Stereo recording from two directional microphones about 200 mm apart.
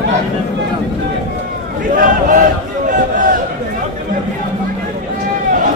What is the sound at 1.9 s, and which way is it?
Speech, 40° right (ahead or behind).